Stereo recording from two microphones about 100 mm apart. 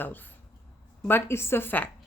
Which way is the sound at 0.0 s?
20° left (ahead or behind).